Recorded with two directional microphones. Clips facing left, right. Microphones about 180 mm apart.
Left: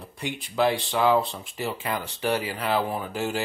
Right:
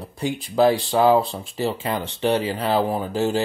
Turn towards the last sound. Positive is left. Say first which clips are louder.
# right 6 dB
turn(degrees=-30)  # may be behind; listen again after turning